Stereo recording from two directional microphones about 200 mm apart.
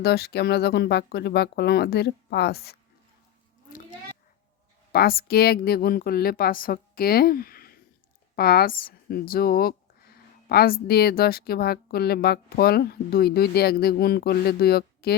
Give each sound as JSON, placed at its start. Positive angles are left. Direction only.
{"t": 0.0, "sound": "speech", "side_deg": 55}
{"t": 4.9, "sound": "speech", "side_deg": 50}